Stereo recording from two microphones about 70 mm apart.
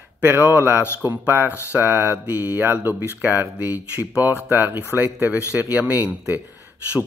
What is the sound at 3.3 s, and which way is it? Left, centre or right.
Speech, right.